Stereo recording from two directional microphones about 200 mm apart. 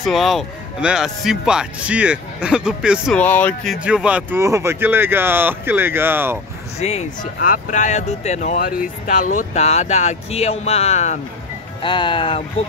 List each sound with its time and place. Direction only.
0.0 s speech: centre (ahead or behind)
3.2 s speech: 10° left (ahead or behind)
3.8 s speech: 5° right (ahead or behind)
6.8 s speech: 35° left (ahead or behind)
7.3 s speech: 45° left (ahead or behind); by 12.4 s 25° left (ahead or behind)